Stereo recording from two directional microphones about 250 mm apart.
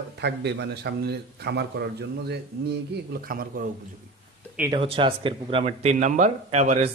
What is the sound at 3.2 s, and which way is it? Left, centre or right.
Speech, right.